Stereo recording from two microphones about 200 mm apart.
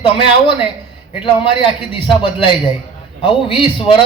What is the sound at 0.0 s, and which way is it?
Speech, 25° left (ahead or behind).